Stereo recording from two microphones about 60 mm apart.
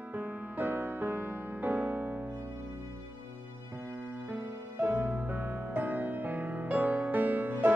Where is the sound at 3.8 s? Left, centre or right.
Right.